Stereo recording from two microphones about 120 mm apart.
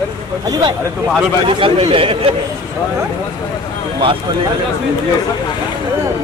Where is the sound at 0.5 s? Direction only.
35° right (ahead or behind).